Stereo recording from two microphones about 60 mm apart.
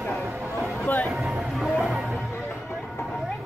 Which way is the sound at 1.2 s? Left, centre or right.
Centre.